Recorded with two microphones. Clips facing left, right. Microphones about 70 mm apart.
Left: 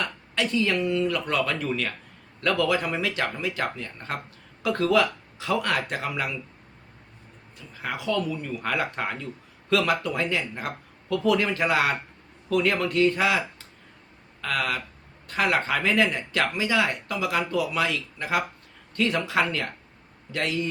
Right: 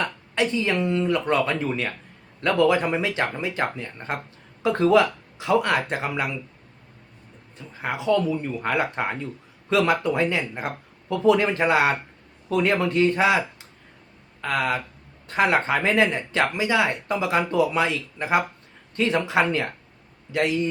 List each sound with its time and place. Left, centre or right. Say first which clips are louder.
0.0 s speech: right 4 dB; right
7.7 s speech: right 5 dB; right